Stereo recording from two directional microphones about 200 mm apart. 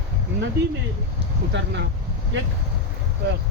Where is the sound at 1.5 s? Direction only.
65° right (ahead or behind).